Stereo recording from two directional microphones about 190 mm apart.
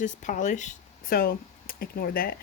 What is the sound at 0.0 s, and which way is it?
Speech, 40° left (ahead or behind).